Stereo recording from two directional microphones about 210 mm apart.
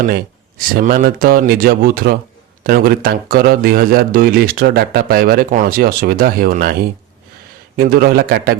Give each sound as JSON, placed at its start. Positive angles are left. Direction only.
{"t": 0.0, "sound": "a man's voice", "side_deg": -45}
{"t": 7.8, "sound": "a man's voice", "side_deg": -45}